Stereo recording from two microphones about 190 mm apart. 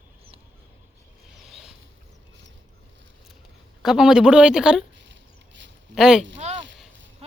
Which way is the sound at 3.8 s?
Centre (ahead or behind).